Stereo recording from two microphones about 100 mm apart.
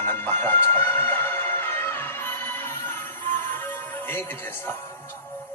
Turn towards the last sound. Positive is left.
turn(degrees=20)  # may be behind; listen again after turning